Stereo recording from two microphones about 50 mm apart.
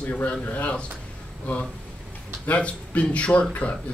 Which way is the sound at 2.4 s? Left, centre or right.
Left.